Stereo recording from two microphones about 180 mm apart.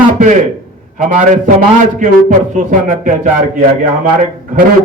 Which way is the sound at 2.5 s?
45° right (ahead or behind).